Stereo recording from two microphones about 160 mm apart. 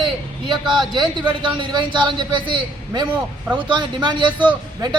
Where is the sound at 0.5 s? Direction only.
30° right (ahead or behind).